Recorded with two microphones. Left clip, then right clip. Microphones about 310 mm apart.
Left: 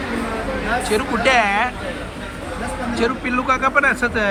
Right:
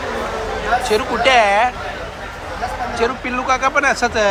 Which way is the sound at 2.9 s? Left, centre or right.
Centre.